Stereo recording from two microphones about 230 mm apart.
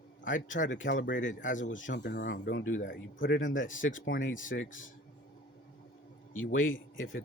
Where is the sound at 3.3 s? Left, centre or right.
Left.